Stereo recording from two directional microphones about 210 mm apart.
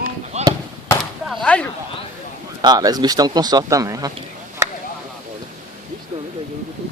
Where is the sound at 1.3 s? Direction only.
5° left (ahead or behind).